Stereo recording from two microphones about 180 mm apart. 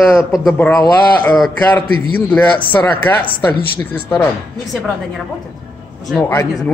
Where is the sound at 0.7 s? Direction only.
15° left (ahead or behind).